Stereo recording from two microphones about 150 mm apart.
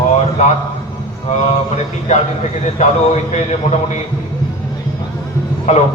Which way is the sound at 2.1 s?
55° left (ahead or behind).